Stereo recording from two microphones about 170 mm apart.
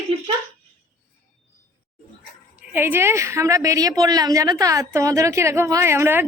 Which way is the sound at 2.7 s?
15° right (ahead or behind).